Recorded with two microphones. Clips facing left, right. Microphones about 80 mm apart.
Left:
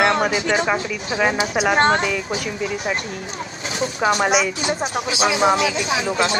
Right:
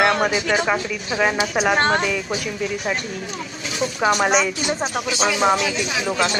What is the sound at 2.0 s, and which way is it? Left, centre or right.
Speech, centre.